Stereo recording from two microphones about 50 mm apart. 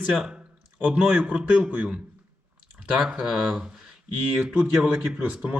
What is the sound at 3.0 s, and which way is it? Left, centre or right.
Speech, centre.